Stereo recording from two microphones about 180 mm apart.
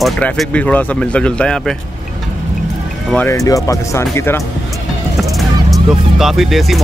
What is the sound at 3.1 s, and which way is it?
Speech, 10° left (ahead or behind).